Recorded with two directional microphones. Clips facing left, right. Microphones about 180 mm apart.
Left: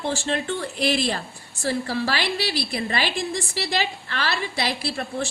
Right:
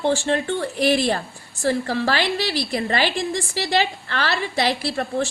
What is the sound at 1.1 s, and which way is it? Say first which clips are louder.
A woman's voice: right 4 dB; 50° right (ahead or behind).